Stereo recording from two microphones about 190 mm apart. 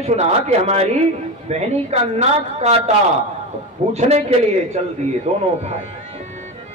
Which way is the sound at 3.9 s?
35° right (ahead or behind).